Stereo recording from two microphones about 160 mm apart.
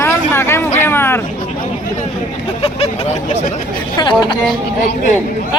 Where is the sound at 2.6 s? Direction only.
35° left (ahead or behind).